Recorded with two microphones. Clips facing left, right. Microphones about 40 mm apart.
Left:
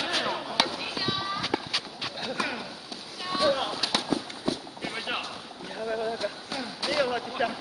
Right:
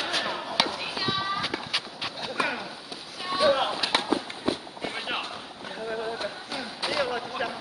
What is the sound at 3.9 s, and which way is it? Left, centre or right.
Run, right.